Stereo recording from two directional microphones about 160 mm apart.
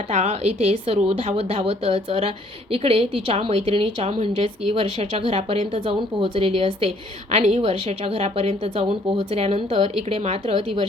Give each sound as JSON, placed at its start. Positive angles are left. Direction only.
{"t": 0.1, "sound": "a woman's voice", "side_deg": -45}